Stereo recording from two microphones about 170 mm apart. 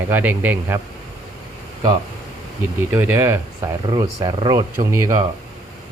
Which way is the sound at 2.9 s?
10° right (ahead or behind).